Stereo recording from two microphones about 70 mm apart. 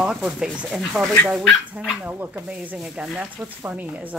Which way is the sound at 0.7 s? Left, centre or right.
Centre.